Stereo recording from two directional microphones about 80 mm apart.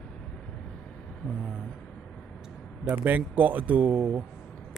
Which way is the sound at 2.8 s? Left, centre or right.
Right.